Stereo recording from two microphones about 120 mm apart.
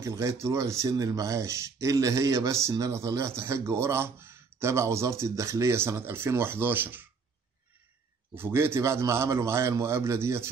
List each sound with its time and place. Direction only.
0.0 s speech: 25° right (ahead or behind)
8.4 s speech: 20° right (ahead or behind)